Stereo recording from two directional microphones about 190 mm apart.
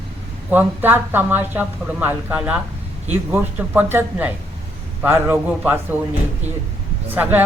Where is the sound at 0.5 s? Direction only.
10° right (ahead or behind).